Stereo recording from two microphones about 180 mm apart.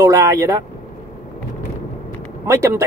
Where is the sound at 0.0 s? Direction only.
15° right (ahead or behind).